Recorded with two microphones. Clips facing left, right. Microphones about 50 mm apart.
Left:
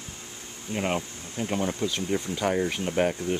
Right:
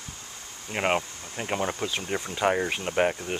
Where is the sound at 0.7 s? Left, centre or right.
Right.